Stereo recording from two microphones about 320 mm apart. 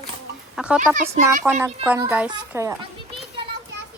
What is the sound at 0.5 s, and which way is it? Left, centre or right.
Speech, centre.